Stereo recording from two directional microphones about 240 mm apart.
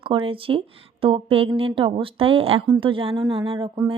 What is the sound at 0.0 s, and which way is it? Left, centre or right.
A woman's voice, right.